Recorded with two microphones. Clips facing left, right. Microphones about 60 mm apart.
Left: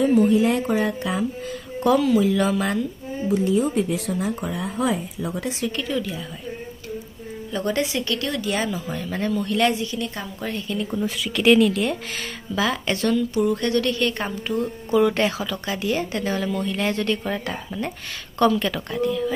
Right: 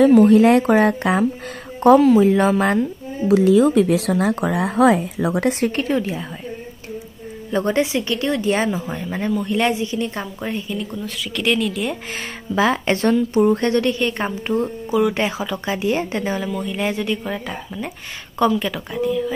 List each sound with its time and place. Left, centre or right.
0.0 s speech: right
1.8 s a woman's voice: right
3.3 s speech: right
7.5 s speech: right
9.1 s speech: centre
10.9 s speech: centre
12.5 s a woman's voice: right
14.9 s speech: centre
15.2 s speech: right
16.3 s speech: centre